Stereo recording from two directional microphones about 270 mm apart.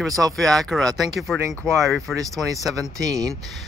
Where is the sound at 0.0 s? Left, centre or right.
Centre.